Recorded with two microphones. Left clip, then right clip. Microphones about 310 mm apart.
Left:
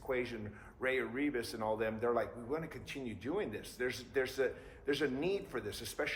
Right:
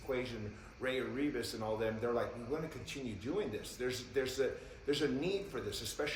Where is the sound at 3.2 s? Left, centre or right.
Left.